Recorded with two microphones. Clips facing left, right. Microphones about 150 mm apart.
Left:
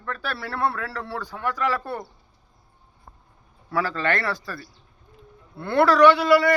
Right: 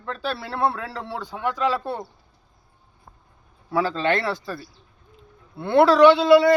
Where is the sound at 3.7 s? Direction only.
20° right (ahead or behind).